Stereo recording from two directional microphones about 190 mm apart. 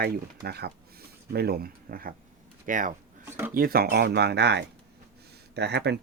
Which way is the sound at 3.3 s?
10° right (ahead or behind).